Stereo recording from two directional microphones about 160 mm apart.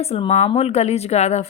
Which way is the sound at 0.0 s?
40° left (ahead or behind).